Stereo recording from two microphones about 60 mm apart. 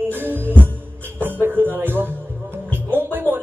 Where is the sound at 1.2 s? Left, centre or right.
Right.